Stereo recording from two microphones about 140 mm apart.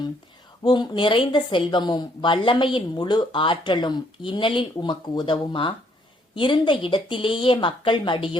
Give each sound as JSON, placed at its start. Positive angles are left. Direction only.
{"t": 0.6, "sound": "a woman's voice", "side_deg": 30}